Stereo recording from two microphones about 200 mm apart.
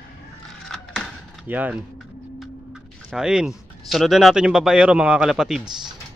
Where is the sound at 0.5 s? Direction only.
5° left (ahead or behind).